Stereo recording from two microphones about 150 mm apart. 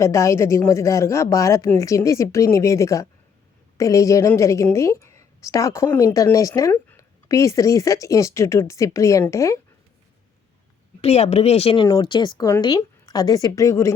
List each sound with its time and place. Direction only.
0.0 s speech: 20° left (ahead or behind)
11.0 s speech: 45° left (ahead or behind); by 13.9 s 20° left (ahead or behind)